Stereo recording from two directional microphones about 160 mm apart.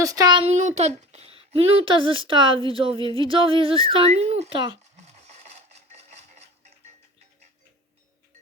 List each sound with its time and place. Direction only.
0.0 s a child's voice: 20° right (ahead or behind)
0.4 s speech: 45° right (ahead or behind)
4.9 s a sound: 45° right (ahead or behind)